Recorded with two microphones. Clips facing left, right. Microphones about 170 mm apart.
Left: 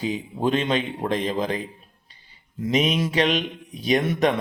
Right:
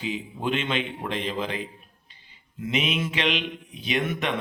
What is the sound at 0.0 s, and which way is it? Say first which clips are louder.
A man's voice: left 5 dB; 40° left (ahead or behind).